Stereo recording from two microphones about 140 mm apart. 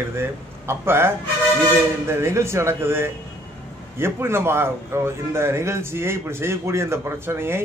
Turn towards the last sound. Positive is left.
turn(degrees=-15)  # may be behind; listen again after turning